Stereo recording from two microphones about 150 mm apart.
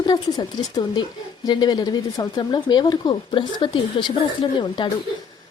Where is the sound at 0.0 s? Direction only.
30° left (ahead or behind).